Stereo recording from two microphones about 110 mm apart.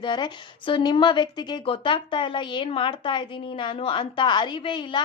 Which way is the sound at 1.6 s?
50° left (ahead or behind).